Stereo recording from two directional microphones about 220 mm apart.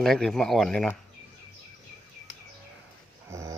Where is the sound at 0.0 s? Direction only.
Centre (ahead or behind).